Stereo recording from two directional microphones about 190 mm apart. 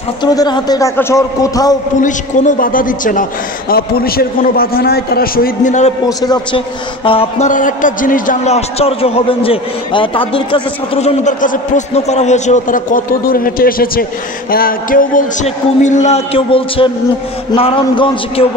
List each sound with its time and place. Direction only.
0.2 s a man's voice: 20° left (ahead or behind)
2.0 s a man's voice: 40° left (ahead or behind)
6.0 s a man's voice: 20° left (ahead or behind)
7.1 s a man's voice: 35° left (ahead or behind)